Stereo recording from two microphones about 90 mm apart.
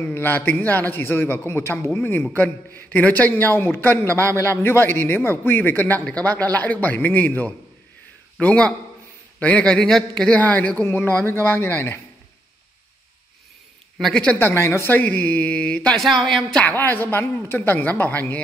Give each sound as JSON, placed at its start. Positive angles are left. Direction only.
{"t": 0.0, "sound": "a man's voice", "side_deg": 25}
{"t": 13.9, "sound": "speech", "side_deg": 5}
{"t": 14.2, "sound": "speech", "side_deg": 15}
{"t": 14.5, "sound": "speech", "side_deg": 30}
{"t": 16.6, "sound": "a man's voice", "side_deg": 20}